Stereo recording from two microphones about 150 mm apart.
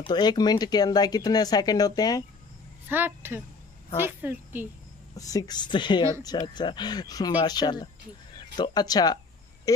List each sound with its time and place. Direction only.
0.0 s speech: 30° left (ahead or behind)
2.9 s a woman's voice: 15° right (ahead or behind)
5.1 s a woman's voice: 25° left (ahead or behind)